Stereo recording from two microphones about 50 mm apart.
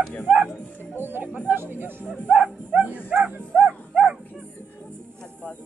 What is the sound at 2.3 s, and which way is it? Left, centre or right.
Dog, right.